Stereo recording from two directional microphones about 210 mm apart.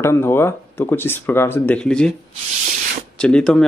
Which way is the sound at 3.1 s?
5° left (ahead or behind).